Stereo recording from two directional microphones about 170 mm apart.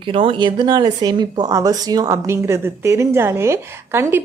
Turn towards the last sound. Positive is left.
turn(degrees=-15)  # may be behind; listen again after turning